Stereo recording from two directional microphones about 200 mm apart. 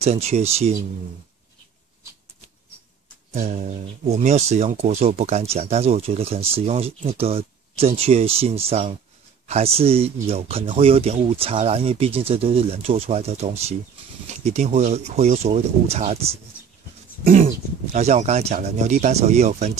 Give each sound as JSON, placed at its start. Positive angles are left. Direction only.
{"t": 0.0, "sound": "speech", "side_deg": -30}
{"t": 3.3, "sound": "speech", "side_deg": -35}
{"t": 17.2, "sound": "dog", "side_deg": -40}
{"t": 17.9, "sound": "speech", "side_deg": -35}